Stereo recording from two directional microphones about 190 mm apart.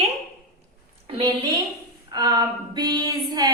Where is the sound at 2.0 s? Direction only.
20° right (ahead or behind).